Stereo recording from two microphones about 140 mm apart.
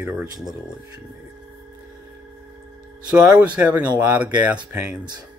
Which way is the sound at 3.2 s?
10° right (ahead or behind).